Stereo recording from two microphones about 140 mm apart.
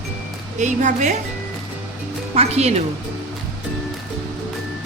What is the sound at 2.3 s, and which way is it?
Speech, 50° right (ahead or behind).